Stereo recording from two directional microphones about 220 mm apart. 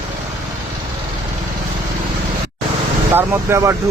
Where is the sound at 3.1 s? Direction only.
10° right (ahead or behind).